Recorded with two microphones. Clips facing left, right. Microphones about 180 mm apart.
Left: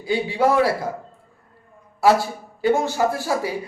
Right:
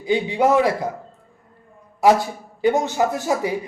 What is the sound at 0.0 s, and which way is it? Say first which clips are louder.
Speech: right 1 dB; 20° right (ahead or behind).